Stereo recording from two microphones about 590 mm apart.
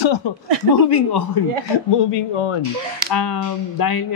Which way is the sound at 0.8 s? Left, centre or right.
Left.